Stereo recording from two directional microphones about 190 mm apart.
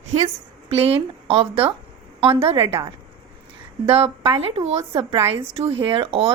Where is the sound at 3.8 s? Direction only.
30° right (ahead or behind).